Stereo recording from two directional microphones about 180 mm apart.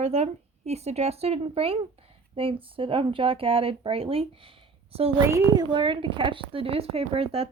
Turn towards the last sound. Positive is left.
turn(degrees=-30)  # may be behind; listen again after turning